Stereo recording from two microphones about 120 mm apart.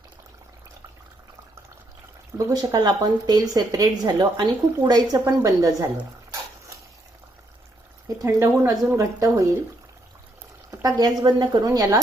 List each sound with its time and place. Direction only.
2.5 s speech: 30° right (ahead or behind)
8.0 s speech: 25° right (ahead or behind)
10.7 s speech: 35° right (ahead or behind)